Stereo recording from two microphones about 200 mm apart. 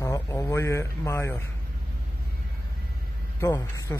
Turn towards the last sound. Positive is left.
turn(degrees=15)  # may be behind; listen again after turning